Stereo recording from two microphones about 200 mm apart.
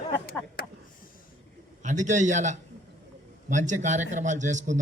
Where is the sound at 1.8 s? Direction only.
40° right (ahead or behind).